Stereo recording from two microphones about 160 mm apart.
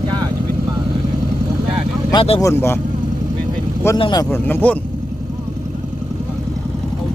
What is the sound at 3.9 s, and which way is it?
Speech, 25° left (ahead or behind).